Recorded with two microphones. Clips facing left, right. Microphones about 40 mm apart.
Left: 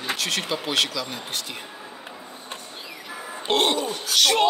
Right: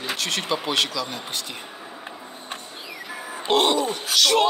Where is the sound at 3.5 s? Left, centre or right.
Centre.